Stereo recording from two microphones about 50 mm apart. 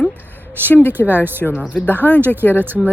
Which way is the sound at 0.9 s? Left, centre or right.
Right.